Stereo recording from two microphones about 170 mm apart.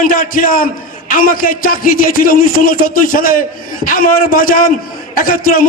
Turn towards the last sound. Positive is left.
turn(degrees=55)  # may be behind; listen again after turning